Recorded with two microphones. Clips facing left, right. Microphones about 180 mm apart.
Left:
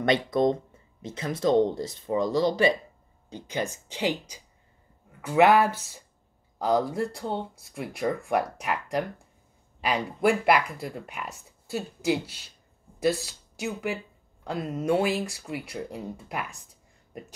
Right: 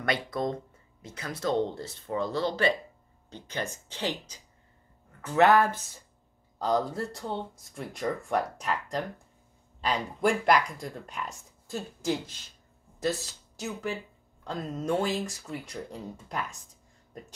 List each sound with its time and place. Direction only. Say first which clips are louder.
0.0 s speech: left 7 dB; 20° left (ahead or behind)